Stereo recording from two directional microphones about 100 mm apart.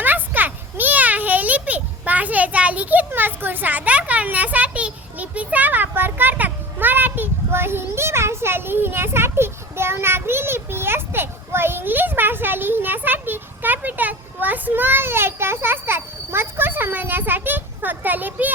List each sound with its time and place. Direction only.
0.0 s children playing: 20° right (ahead or behind)